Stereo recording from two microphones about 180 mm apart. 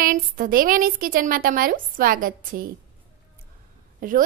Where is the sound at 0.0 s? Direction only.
50° right (ahead or behind).